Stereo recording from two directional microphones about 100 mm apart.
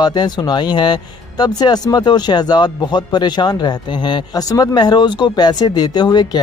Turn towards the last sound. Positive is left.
turn(degrees=45)  # may be behind; listen again after turning